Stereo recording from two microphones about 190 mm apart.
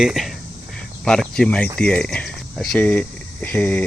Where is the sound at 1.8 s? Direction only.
5° left (ahead or behind).